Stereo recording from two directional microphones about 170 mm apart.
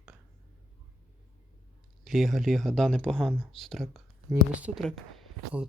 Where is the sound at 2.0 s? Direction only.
Centre (ahead or behind).